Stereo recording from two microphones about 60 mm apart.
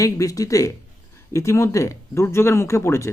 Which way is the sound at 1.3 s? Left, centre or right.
Left.